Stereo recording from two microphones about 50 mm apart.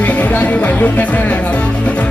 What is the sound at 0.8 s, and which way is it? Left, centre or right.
Speech, left.